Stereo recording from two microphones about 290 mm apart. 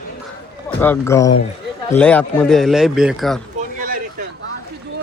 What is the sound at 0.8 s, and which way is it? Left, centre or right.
A man's voice, centre.